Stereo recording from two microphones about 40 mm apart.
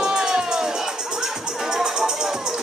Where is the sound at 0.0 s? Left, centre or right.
Centre.